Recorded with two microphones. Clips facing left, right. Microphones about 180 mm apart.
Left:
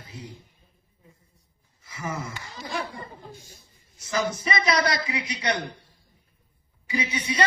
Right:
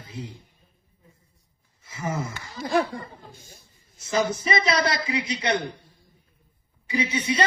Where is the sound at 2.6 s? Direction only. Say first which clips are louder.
Right 9 dB; 50° right (ahead or behind).